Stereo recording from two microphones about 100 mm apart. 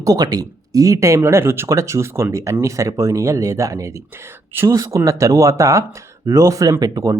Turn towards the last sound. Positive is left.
turn(degrees=-35)  # may be behind; listen again after turning